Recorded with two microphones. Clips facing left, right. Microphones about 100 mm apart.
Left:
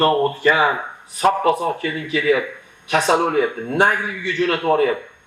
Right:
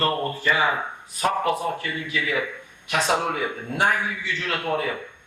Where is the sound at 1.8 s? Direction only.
55° left (ahead or behind).